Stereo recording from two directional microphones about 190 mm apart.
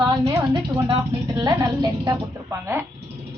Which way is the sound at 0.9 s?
20° right (ahead or behind).